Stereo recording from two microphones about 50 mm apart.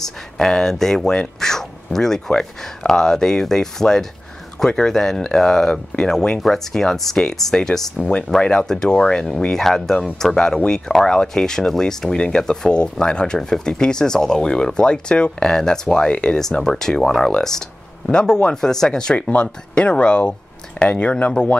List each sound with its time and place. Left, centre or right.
0.0 s speech: centre; by 21.3 s left